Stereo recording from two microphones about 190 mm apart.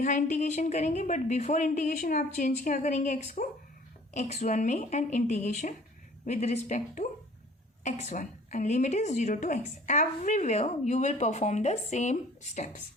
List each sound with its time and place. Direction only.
0.0 s a woman's voice: 40° left (ahead or behind)